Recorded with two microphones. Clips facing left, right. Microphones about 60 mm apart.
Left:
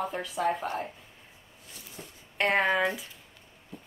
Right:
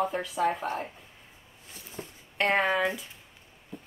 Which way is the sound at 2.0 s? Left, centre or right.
Right.